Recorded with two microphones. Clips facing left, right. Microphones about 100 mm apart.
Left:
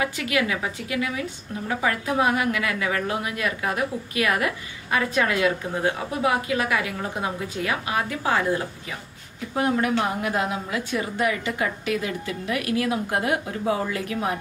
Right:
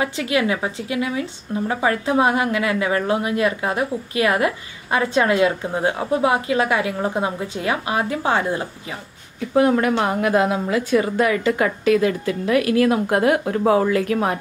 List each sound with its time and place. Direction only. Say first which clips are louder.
0.0 s a woman's voice: right 4 dB; 25° right (ahead or behind)
9.7 s speech: right 4 dB; 70° right (ahead or behind)